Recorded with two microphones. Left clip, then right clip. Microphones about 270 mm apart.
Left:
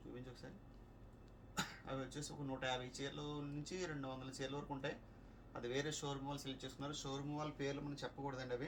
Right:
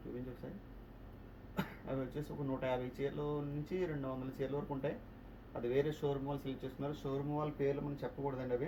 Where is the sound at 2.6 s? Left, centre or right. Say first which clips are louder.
Right 5 dB; centre.